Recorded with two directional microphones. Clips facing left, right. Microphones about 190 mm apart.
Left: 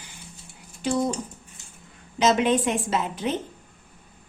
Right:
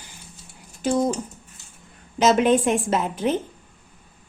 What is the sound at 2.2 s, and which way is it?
A woman's voice, 50° right (ahead or behind).